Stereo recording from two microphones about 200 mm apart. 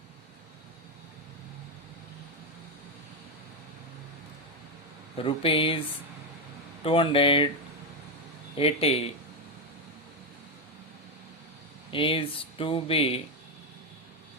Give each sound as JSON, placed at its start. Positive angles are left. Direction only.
{"t": 5.1, "sound": "speech", "side_deg": 25}
{"t": 6.8, "sound": "speech", "side_deg": 25}
{"t": 8.5, "sound": "speech", "side_deg": 30}
{"t": 11.9, "sound": "speech", "side_deg": 25}